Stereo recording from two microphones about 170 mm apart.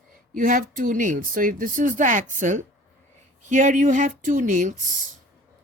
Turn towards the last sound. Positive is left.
turn(degrees=-50)  # may be behind; listen again after turning